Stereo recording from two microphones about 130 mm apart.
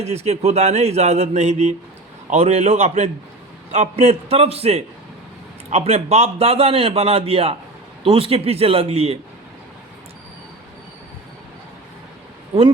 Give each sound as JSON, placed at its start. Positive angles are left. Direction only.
{"t": 0.0, "sound": "a man's voice", "side_deg": -55}